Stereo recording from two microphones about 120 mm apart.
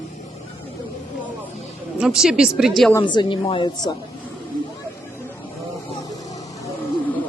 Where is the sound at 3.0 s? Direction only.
40° left (ahead or behind).